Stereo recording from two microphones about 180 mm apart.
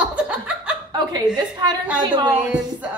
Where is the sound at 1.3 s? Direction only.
25° right (ahead or behind).